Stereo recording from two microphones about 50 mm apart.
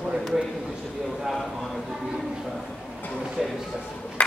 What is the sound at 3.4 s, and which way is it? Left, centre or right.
Speech, centre.